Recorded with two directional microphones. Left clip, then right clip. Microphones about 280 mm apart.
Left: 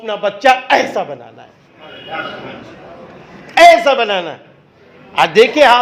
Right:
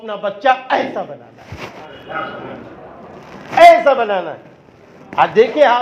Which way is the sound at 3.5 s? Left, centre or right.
Left.